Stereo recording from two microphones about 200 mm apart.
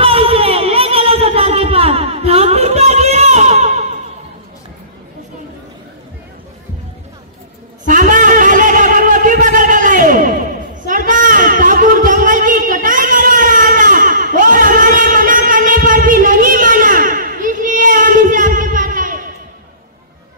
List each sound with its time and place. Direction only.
0.0 s music: 30° right (ahead or behind)
7.8 s music: 40° right (ahead or behind)
10.9 s a sound: 40° right (ahead or behind)